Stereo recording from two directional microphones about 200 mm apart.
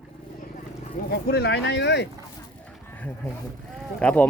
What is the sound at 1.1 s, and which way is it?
Speech, 55° left (ahead or behind).